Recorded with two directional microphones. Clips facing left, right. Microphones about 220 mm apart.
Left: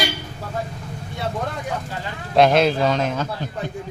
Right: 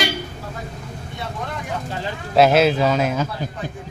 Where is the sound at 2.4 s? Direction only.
5° right (ahead or behind).